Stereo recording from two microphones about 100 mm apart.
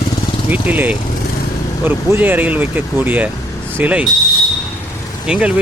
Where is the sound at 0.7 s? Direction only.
15° right (ahead or behind).